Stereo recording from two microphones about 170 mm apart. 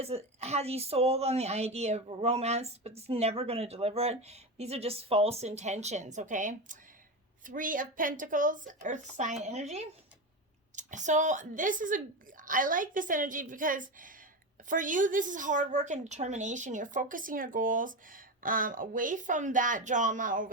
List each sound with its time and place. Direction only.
0.0 s a woman's voice: 35° right (ahead or behind)